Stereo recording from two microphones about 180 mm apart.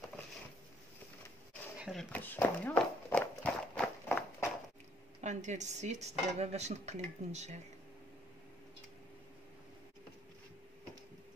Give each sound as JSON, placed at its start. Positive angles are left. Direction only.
{"t": 1.8, "sound": "a sound", "side_deg": 0}
{"t": 2.1, "sound": "walk", "side_deg": 10}
{"t": 5.2, "sound": "speech", "side_deg": -40}